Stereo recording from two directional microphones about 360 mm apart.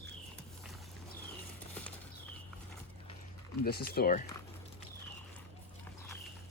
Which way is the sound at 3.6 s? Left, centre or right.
Left.